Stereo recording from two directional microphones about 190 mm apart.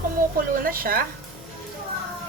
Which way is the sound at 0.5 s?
50° right (ahead or behind).